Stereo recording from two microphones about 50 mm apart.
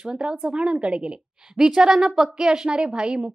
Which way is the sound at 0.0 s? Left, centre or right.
Centre.